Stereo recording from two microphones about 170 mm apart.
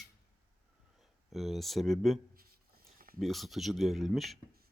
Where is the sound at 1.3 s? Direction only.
Centre (ahead or behind).